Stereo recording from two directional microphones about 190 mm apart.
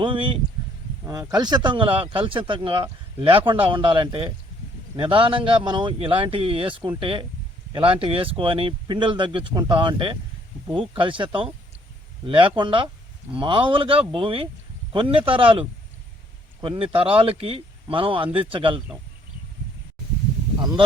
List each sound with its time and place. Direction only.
0.0 s speech: 25° right (ahead or behind)